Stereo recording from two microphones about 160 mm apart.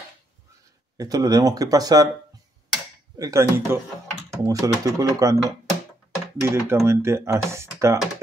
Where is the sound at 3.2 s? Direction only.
20° right (ahead or behind).